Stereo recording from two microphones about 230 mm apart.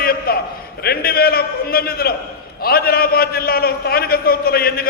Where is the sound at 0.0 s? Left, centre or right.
Left.